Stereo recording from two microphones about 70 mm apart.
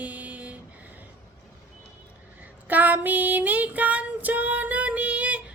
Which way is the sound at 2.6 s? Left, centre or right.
Right.